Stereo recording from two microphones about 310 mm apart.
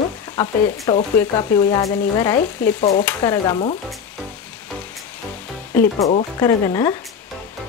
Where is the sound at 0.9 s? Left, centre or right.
Centre.